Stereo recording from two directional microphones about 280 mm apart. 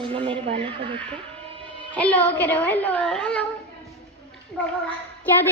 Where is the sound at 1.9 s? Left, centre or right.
Centre.